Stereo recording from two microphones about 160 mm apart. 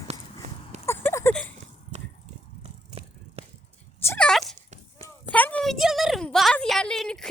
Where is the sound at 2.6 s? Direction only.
35° right (ahead or behind).